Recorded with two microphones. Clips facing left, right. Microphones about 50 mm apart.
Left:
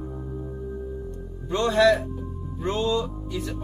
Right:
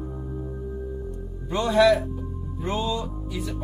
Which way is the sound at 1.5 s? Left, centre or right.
Centre.